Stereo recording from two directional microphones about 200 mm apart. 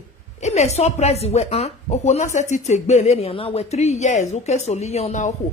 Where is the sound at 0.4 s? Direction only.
35° left (ahead or behind).